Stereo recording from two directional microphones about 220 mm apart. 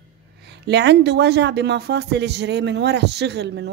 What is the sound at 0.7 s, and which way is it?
Speech, 50° right (ahead or behind).